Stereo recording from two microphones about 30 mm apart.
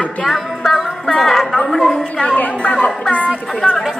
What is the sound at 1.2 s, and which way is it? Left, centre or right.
Speech, centre.